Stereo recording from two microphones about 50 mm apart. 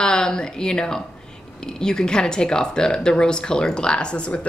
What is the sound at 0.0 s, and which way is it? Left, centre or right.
A woman's voice, centre.